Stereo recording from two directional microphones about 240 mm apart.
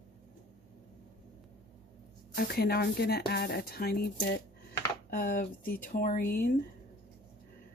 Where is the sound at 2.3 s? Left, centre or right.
Left.